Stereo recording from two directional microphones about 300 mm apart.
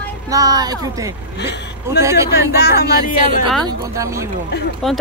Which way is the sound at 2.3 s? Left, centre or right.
Left.